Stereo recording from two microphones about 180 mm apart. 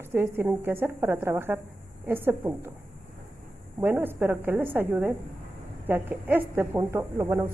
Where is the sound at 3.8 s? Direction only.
10° right (ahead or behind).